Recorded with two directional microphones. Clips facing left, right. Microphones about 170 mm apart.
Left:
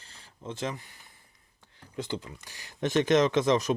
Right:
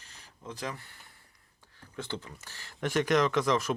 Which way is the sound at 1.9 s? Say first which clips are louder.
Left 4 dB; 15° left (ahead or behind).